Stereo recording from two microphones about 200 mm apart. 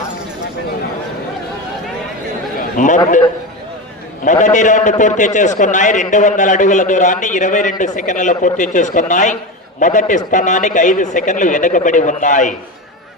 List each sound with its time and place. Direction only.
2.6 s chatter: 40° left (ahead or behind)
4.3 s a man's voice: 40° left (ahead or behind)